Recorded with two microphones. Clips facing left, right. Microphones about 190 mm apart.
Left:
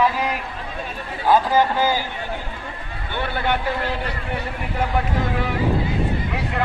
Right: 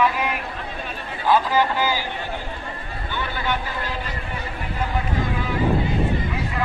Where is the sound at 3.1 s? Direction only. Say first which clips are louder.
Left 3 dB; 60° left (ahead or behind).